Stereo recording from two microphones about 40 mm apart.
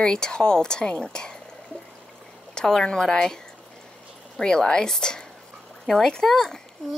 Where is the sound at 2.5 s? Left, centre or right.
Centre.